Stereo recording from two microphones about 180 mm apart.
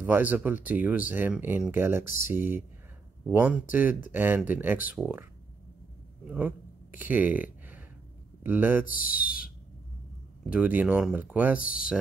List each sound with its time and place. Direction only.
0.0 s speech: 10° right (ahead or behind)
6.2 s a sound: 10° right (ahead or behind)
8.4 s speech: 10° right (ahead or behind)
8.8 s speech: 50° left (ahead or behind)
10.5 s speech: 10° right (ahead or behind)
11.6 s speech: 50° left (ahead or behind)